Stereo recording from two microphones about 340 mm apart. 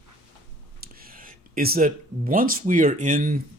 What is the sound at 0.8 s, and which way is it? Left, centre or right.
Speech, right.